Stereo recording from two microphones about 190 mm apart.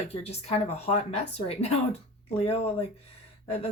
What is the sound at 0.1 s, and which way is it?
Speech, 30° left (ahead or behind).